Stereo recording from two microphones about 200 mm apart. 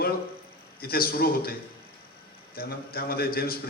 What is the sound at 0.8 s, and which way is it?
Speech, 50° left (ahead or behind).